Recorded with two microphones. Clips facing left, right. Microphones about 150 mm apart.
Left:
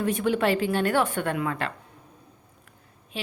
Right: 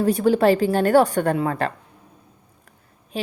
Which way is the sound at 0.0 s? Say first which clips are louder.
Right 7 dB; 35° right (ahead or behind).